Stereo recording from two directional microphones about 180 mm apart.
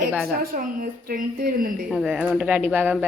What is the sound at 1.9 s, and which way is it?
Speech, 5° right (ahead or behind).